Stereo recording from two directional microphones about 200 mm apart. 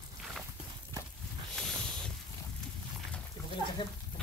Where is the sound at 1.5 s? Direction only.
Centre (ahead or behind).